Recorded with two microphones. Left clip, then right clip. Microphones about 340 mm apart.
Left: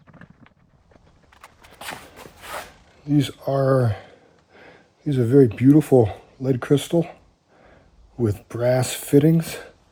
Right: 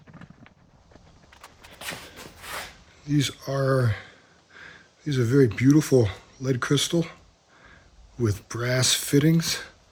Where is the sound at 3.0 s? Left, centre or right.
Centre.